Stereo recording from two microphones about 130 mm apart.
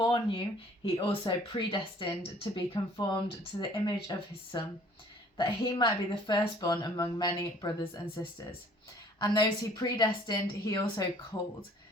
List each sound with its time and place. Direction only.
0.0 s a sound: 40° left (ahead or behind)
1.0 s speech: 40° left (ahead or behind)
8.0 s speech: 40° left (ahead or behind)